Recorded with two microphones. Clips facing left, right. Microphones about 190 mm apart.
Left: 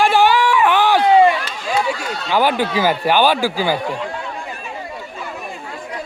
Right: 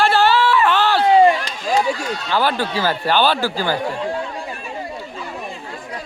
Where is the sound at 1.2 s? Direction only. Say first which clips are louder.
Even; 40° right (ahead or behind).